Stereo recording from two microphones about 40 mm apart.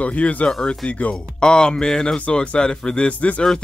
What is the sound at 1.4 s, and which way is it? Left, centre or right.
Speech, centre.